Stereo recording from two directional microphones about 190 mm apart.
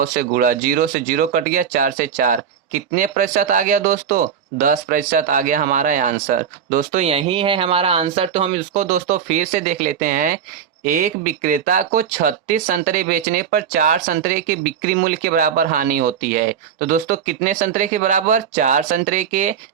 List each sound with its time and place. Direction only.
0.0 s speech: 50° right (ahead or behind); by 8.6 s 30° right (ahead or behind)
8.7 s speech: 45° right (ahead or behind)